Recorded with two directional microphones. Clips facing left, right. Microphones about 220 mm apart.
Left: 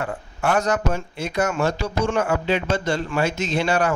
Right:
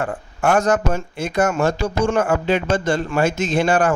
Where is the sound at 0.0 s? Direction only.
50° right (ahead or behind).